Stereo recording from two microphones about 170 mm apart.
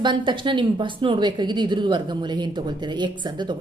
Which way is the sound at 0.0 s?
30° right (ahead or behind).